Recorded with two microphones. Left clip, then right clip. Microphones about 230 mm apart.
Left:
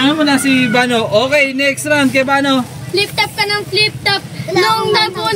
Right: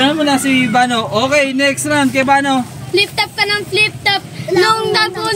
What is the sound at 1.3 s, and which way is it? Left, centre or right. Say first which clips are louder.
Speech: even; centre.